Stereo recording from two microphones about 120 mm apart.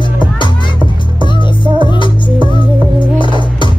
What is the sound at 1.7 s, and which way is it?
Music, 40° left (ahead or behind).